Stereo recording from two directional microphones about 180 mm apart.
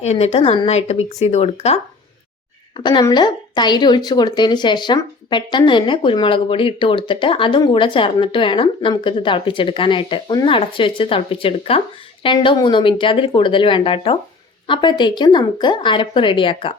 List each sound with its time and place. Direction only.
0.0 s speech: 35° left (ahead or behind)
2.7 s a woman's voice: 25° left (ahead or behind)